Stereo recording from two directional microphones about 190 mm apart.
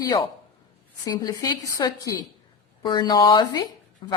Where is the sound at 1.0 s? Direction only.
20° left (ahead or behind).